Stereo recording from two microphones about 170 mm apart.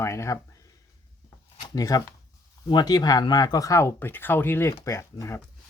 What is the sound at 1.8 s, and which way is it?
Speech, 20° left (ahead or behind).